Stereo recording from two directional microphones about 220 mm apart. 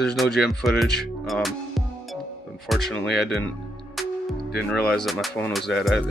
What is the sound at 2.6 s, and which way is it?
Speech, centre (ahead or behind).